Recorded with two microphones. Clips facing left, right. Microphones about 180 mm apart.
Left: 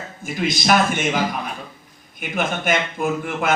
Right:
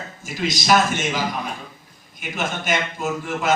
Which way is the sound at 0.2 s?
55° left (ahead or behind).